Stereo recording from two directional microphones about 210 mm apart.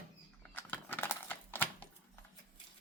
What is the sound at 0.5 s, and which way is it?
Typing, 10° left (ahead or behind).